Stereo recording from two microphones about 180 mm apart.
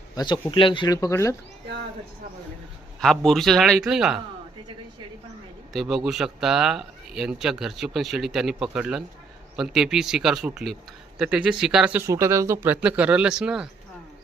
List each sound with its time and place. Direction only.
0.2 s speech: 25° left (ahead or behind)
3.0 s a man's voice: centre (ahead or behind)
5.7 s a man's voice: centre (ahead or behind)